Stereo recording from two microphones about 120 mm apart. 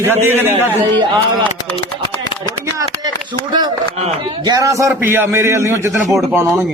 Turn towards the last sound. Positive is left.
turn(degrees=-20)  # may be behind; listen again after turning